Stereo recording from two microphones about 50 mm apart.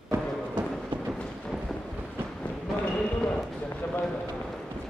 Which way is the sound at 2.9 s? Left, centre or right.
Left.